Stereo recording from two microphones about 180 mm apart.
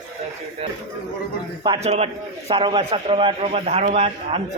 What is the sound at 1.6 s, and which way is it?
A man's voice, 30° right (ahead or behind).